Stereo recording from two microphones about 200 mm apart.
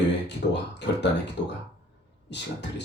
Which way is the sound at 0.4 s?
50° left (ahead or behind).